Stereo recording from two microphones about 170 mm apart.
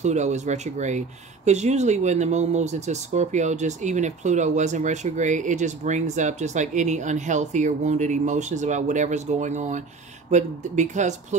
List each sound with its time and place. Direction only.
0.0 s speech: 45° right (ahead or behind)